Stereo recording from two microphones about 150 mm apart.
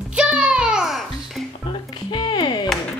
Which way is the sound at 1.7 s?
30° left (ahead or behind).